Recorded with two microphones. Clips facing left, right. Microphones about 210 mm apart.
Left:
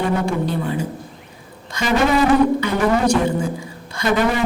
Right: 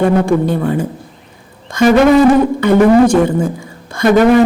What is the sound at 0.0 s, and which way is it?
Speech, 50° right (ahead or behind).